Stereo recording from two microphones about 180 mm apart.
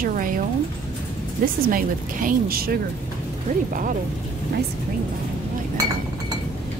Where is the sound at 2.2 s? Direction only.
55° right (ahead or behind).